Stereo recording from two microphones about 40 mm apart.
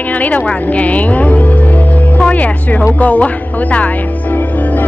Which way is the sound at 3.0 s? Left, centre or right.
Left.